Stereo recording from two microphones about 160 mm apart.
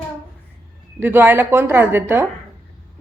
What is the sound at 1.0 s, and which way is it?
A woman's voice, 15° right (ahead or behind).